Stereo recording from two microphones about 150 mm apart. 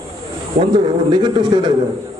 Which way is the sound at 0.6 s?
30° right (ahead or behind).